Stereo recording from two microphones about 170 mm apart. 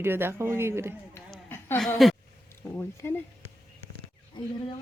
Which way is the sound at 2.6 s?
15° left (ahead or behind).